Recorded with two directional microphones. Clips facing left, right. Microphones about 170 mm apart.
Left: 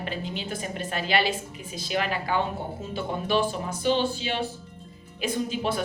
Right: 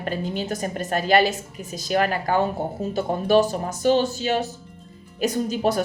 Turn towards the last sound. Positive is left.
turn(degrees=-40)  # may be behind; listen again after turning